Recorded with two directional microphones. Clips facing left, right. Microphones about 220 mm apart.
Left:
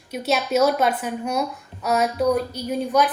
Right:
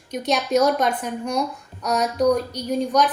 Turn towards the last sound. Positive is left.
turn(degrees=5)  # may be behind; listen again after turning